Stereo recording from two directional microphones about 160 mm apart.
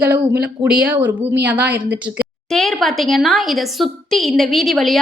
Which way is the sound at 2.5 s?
Centre (ahead or behind).